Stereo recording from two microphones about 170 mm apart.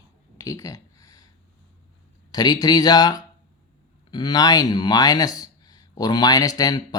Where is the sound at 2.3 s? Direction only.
25° left (ahead or behind).